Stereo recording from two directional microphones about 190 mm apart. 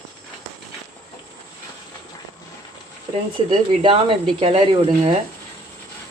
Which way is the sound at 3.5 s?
25° right (ahead or behind).